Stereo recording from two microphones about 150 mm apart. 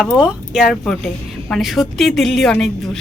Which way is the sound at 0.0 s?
Centre (ahead or behind).